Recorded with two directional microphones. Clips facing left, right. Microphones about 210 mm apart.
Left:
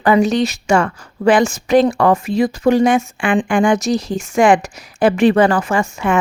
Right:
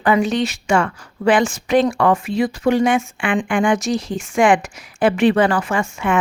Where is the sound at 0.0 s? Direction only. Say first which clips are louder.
Left 3 dB; 40° left (ahead or behind).